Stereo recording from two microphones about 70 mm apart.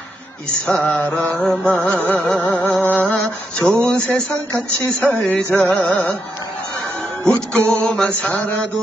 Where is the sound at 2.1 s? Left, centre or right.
Centre.